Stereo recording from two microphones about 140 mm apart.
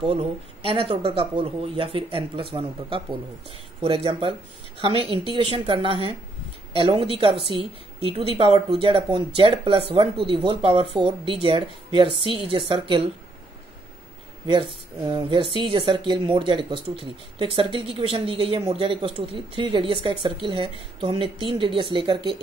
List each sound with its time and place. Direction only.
0.1 s speech: 40° right (ahead or behind)
15.0 s speech: 35° right (ahead or behind)